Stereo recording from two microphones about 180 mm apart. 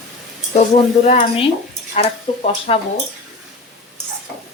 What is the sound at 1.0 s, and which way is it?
Speech, 40° left (ahead or behind).